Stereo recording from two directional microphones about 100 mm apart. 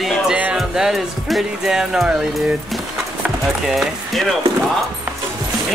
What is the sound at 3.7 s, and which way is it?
Speech, centre (ahead or behind).